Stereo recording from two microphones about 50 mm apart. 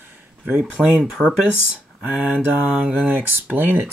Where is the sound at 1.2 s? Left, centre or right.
Centre.